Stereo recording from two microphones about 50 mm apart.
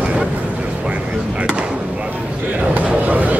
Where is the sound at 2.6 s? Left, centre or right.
Right.